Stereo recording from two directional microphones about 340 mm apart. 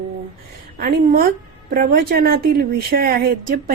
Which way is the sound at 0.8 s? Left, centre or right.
Right.